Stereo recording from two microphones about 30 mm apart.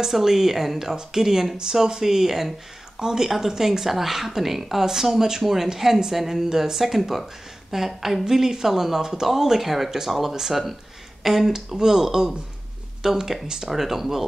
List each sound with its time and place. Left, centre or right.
0.1 s a woman's voice: centre
1.6 s a woman's voice: centre
9.0 s speech: centre
9.3 s a woman's voice: centre